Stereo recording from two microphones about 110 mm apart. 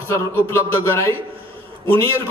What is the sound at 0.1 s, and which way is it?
A man's voice, 25° left (ahead or behind).